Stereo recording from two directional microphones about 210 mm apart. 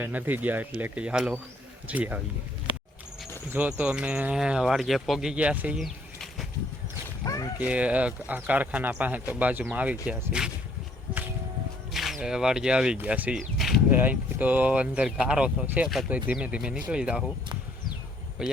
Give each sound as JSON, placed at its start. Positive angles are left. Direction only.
{"t": 0.0, "sound": "speech", "side_deg": -10}
{"t": 3.5, "sound": "speech", "side_deg": -5}
{"t": 7.3, "sound": "a sound", "side_deg": 15}
{"t": 7.6, "sound": "speech", "side_deg": -5}
{"t": 12.2, "sound": "speech", "side_deg": -5}
{"t": 18.4, "sound": "speech", "side_deg": -5}